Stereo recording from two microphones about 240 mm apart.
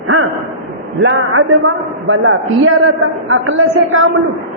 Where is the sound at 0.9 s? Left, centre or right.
Right.